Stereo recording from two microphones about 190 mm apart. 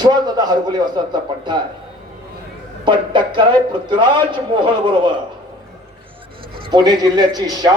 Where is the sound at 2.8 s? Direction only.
25° right (ahead or behind).